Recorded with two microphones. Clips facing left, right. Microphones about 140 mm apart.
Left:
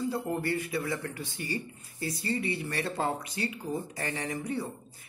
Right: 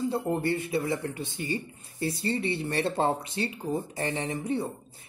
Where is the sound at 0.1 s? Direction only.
25° right (ahead or behind).